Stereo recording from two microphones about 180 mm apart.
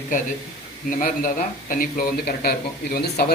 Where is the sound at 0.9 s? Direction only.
50° left (ahead or behind).